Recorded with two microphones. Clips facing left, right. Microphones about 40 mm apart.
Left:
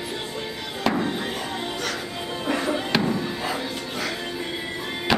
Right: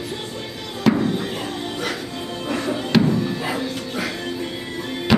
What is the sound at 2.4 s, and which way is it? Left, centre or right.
Music, centre.